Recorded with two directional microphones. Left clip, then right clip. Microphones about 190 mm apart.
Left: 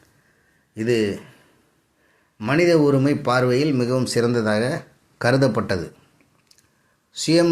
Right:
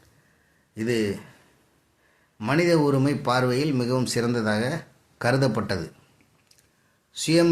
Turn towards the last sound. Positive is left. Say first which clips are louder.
# left 3 dB
turn(degrees=15)  # may be behind; listen again after turning